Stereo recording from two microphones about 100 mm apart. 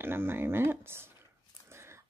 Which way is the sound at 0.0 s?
20° right (ahead or behind).